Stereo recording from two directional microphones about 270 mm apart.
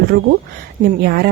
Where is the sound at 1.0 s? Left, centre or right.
Right.